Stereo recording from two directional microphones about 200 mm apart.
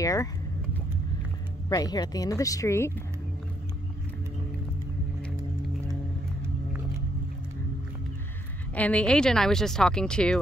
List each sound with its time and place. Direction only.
0.0 s speech: 15° left (ahead or behind)
1.7 s speech: 20° left (ahead or behind)
8.7 s speech: 5° left (ahead or behind)